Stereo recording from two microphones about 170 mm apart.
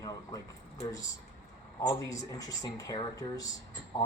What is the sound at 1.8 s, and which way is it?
Speech, 20° left (ahead or behind).